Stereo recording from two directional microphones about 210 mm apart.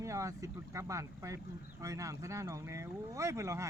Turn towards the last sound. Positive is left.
turn(degrees=-15)  # may be behind; listen again after turning